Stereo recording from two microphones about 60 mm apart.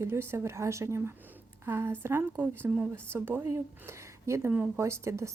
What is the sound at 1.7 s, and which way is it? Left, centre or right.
A woman's voice, right.